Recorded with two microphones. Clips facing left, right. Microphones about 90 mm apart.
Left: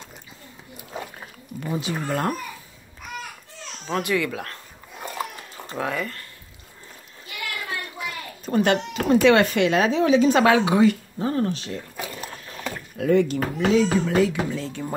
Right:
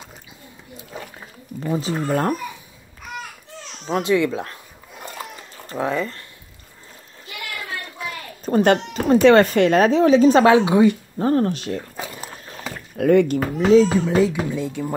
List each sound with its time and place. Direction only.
1.6 s speech: 30° right (ahead or behind)
3.8 s speech: 25° right (ahead or behind)
5.8 s speech: 25° right (ahead or behind)
8.5 s speech: 35° right (ahead or behind)
11.1 s speech: 40° right (ahead or behind)
12.9 s speech: 55° right (ahead or behind)
13.6 s speech: 30° right (ahead or behind)
14.0 s speech: 20° right (ahead or behind)